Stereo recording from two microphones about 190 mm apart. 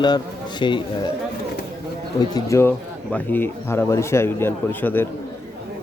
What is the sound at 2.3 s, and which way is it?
A man's voice, 15° left (ahead or behind).